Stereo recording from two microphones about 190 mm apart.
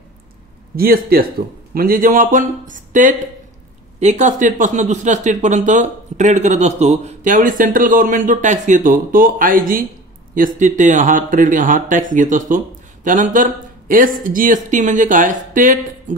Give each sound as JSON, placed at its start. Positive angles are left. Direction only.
{"t": 0.7, "sound": "speech", "side_deg": -50}